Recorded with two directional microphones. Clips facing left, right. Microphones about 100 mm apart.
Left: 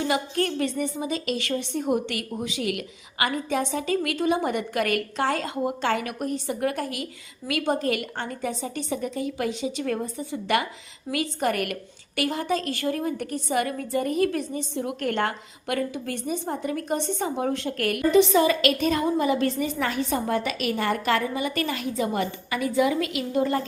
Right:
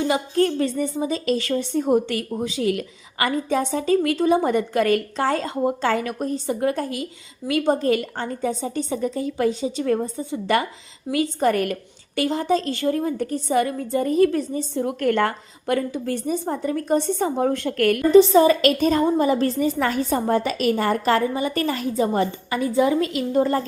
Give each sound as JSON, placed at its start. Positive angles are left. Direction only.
{"t": 0.1, "sound": "a woman's voice", "side_deg": -25}
{"t": 18.1, "sound": "a woman's voice", "side_deg": -35}